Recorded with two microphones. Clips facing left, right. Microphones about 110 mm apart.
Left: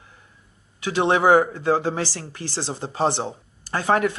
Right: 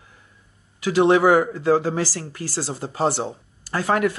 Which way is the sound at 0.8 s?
20° left (ahead or behind).